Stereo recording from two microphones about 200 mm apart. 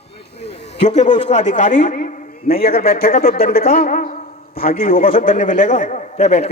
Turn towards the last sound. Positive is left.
turn(degrees=35)  # may be behind; listen again after turning